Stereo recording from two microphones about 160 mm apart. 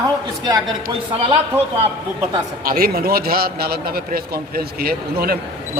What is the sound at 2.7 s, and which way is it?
A man's voice, 70° right (ahead or behind).